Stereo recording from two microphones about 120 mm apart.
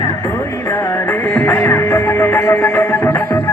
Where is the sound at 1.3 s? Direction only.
15° left (ahead or behind).